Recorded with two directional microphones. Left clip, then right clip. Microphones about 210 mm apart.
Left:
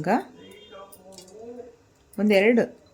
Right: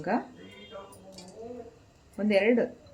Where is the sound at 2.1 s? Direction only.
55° left (ahead or behind).